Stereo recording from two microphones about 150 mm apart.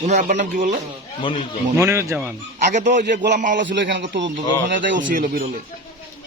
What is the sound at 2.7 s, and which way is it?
A man's voice, 55° right (ahead or behind).